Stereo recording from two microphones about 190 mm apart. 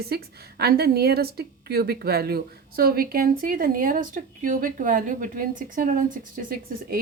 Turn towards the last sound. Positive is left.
turn(degrees=-50)  # may be behind; listen again after turning